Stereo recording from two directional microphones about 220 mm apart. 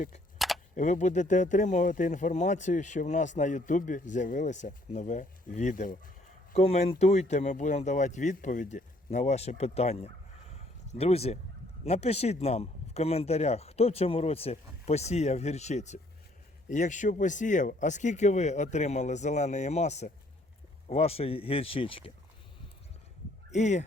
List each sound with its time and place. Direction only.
0.3 s a sound: centre (ahead or behind)
0.8 s speech: 35° left (ahead or behind)
23.5 s speech: 30° left (ahead or behind)